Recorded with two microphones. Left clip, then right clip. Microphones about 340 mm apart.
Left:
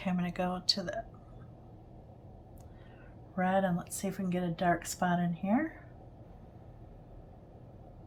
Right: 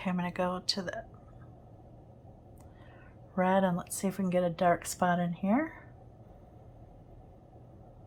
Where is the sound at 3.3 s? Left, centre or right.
Centre.